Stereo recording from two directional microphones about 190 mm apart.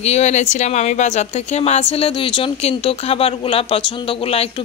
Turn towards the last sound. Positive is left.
turn(degrees=30)  # may be behind; listen again after turning